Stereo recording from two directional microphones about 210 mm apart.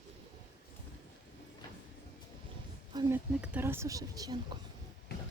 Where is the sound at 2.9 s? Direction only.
10° right (ahead or behind).